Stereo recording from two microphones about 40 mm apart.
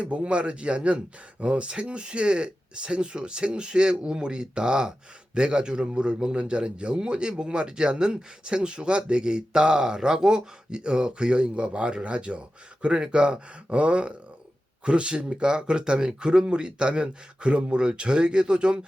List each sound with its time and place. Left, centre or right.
0.0 s speech: right